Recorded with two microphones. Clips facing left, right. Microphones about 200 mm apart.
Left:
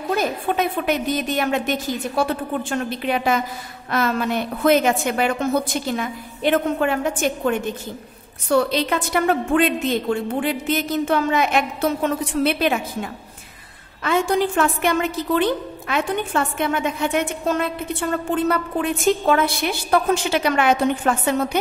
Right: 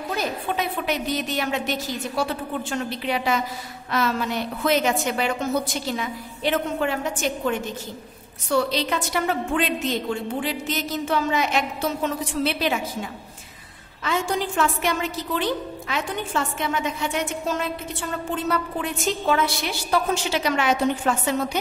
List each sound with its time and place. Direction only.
0.1 s a woman's voice: 50° left (ahead or behind)